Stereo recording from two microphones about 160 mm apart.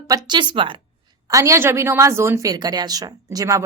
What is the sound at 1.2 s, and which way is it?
A woman's voice, 20° right (ahead or behind).